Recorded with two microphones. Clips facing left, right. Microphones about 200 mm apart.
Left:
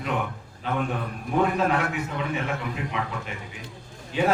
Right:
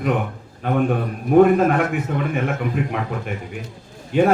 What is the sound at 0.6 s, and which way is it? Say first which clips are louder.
A man's voice: right 8 dB; 55° right (ahead or behind).